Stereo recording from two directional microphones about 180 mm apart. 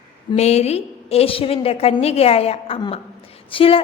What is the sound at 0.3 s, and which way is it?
A woman's voice, 35° left (ahead or behind).